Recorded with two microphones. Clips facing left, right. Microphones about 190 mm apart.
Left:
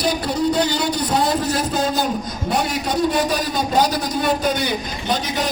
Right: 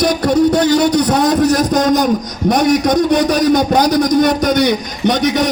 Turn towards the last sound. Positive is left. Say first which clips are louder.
# right 9 dB
turn(degrees=-75)  # may be behind; listen again after turning